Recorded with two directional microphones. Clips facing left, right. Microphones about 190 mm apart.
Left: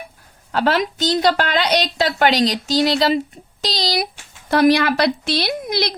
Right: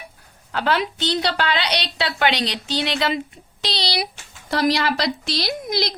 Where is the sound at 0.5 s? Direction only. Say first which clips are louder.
Left 3 dB; 40° left (ahead or behind).